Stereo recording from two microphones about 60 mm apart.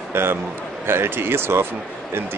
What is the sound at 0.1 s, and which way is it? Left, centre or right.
A man's voice, right.